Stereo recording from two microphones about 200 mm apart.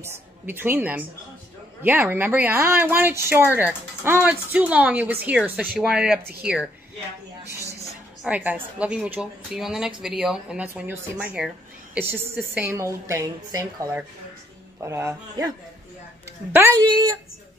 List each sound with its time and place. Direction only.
0.0 s a woman's voice: 10° right (ahead or behind)
8.2 s a woman's voice: 5° right (ahead or behind)
16.5 s speech: 15° right (ahead or behind)